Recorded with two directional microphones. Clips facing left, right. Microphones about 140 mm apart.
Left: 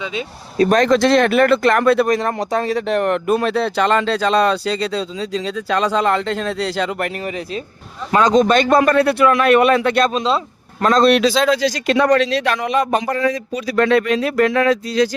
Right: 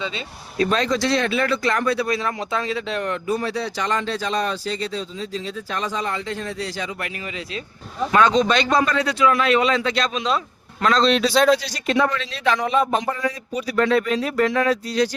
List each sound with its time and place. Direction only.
0.5 s speech: 35° left (ahead or behind)
0.8 s speech: 60° left (ahead or behind)
2.0 s speech: 45° left (ahead or behind); by 6.9 s 80° left
8.3 s speech: 50° left (ahead or behind)
10.1 s speech: 35° left (ahead or behind)
10.8 s a man's voice: 45° left (ahead or behind)
11.1 s a man's voice: 90° left